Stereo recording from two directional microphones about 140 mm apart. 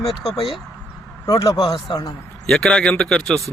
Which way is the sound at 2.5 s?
5° left (ahead or behind).